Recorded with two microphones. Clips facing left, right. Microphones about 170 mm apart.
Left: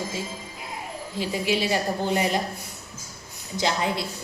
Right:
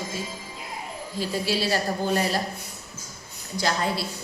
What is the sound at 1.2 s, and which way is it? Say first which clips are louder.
A woman's voice: left 1 dB; 15° left (ahead or behind).